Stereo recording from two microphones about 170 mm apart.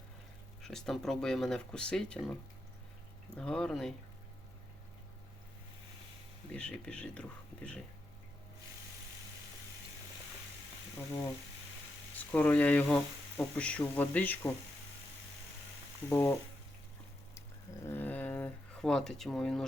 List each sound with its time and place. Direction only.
0.6 s speech: 5° left (ahead or behind)
3.3 s speech: 5° left (ahead or behind)
6.5 s speech: 5° left (ahead or behind)
12.3 s speech: 10° left (ahead or behind)
16.0 s speech: 15° left (ahead or behind)
17.8 s a sound: 10° left (ahead or behind)